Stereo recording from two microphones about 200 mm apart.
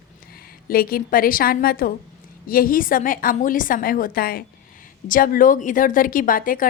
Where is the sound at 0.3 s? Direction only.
50° left (ahead or behind).